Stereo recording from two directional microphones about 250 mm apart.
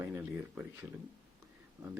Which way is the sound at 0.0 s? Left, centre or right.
Centre.